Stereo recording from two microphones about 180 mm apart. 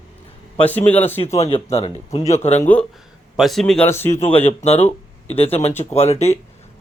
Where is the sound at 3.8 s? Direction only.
15° left (ahead or behind).